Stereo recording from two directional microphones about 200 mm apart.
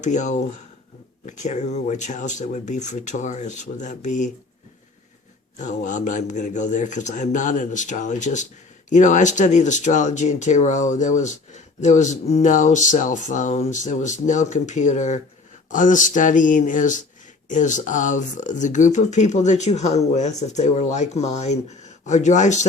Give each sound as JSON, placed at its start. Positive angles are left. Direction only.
{"t": 0.0, "sound": "speech", "side_deg": 35}
{"t": 5.5, "sound": "speech", "side_deg": 40}